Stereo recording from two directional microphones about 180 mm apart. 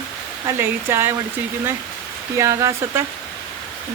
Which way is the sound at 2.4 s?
15° right (ahead or behind).